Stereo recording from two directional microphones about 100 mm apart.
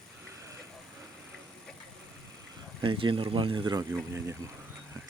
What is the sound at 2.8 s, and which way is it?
Speech, 60° right (ahead or behind).